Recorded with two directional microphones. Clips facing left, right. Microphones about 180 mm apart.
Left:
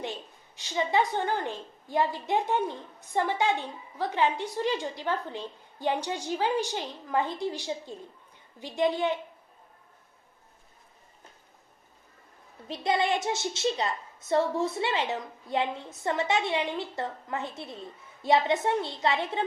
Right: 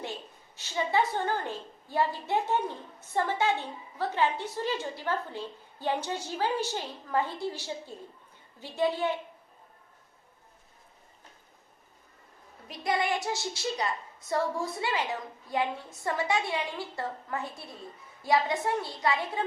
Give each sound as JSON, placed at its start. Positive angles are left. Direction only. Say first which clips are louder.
{"t": 0.0, "sound": "a woman's voice", "louder": "left 2 dB", "side_deg": 15}
{"t": 12.6, "sound": "a woman's voice", "louder": "left 3 dB", "side_deg": 25}